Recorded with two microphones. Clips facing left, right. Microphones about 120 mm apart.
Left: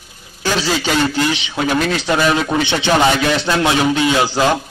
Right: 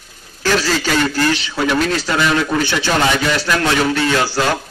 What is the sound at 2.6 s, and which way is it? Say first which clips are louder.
A man's voice: left 2 dB; 20° left (ahead or behind).